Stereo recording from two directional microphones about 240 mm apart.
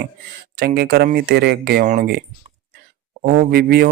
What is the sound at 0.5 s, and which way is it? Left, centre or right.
Speech, right.